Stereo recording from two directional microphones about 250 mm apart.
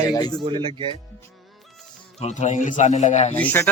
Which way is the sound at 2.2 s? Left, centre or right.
Left.